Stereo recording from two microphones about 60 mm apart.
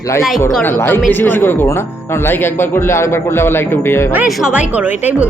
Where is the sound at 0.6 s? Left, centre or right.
Left.